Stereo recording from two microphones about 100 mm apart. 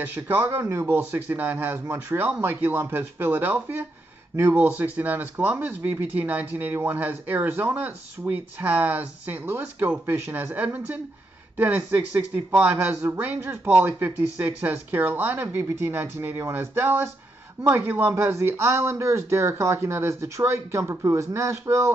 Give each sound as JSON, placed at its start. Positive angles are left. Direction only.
{"t": 0.0, "sound": "speech", "side_deg": -20}